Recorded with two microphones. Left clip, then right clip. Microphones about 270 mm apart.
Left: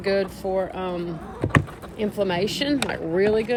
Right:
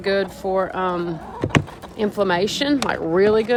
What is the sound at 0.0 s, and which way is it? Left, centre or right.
Speech, centre.